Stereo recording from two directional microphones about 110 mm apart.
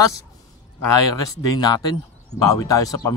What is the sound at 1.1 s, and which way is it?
Speech, 35° left (ahead or behind).